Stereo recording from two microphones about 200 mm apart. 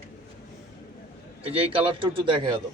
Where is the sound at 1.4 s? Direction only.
30° right (ahead or behind).